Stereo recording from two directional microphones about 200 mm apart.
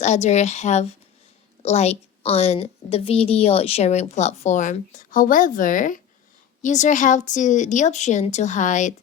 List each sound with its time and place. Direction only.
0.0 s a woman's voice: 35° left (ahead or behind)